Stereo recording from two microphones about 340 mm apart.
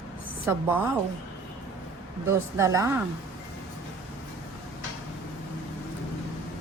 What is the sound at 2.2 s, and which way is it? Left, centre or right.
Speech, centre.